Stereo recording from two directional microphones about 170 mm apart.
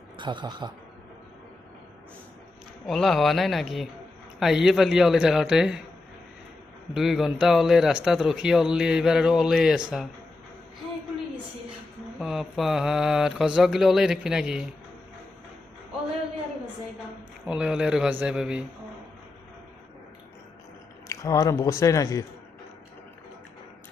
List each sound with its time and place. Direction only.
0.2 s speech: 25° right (ahead or behind)
2.8 s speech: centre (ahead or behind)
6.9 s speech: centre (ahead or behind)
12.2 s speech: centre (ahead or behind)
17.4 s speech: 5° right (ahead or behind)
21.1 s speech: 20° left (ahead or behind)